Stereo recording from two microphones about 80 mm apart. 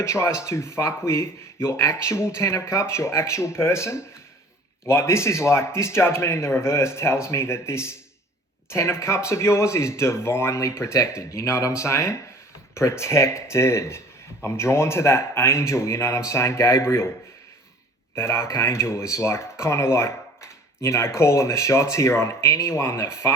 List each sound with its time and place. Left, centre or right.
0.0 s speech: left
18.1 s speech: left